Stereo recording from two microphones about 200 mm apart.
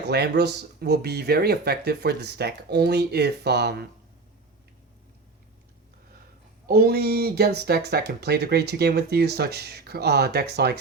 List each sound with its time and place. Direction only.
0.1 s speech: 55° right (ahead or behind)
6.7 s speech: 50° right (ahead or behind)